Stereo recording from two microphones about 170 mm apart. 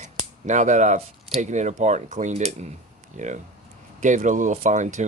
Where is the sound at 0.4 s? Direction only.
45° right (ahead or behind).